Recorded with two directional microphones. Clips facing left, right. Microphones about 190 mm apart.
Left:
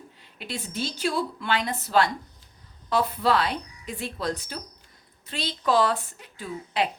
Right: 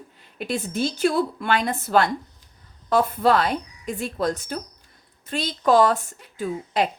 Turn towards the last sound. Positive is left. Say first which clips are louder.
# right 4 dB
turn(degrees=-45)  # may be behind; listen again after turning